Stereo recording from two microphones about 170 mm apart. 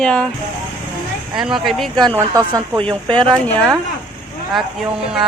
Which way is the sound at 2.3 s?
20° right (ahead or behind).